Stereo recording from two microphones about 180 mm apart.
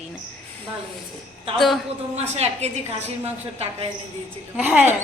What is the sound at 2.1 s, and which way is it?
Speech, 35° right (ahead or behind).